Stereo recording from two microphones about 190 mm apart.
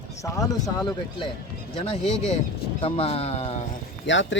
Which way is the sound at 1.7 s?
30° left (ahead or behind).